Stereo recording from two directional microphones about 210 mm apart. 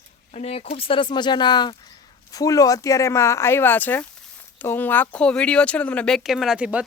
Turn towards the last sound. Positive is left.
turn(degrees=-5)  # may be behind; listen again after turning